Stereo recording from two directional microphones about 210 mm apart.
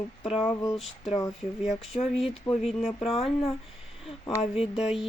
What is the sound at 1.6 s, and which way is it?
Speech, 30° left (ahead or behind).